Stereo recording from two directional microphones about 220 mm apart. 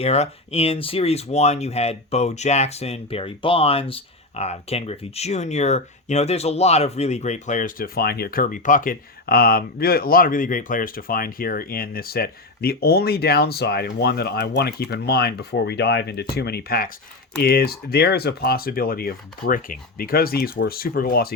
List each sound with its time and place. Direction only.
0.0 s speech: 30° left (ahead or behind)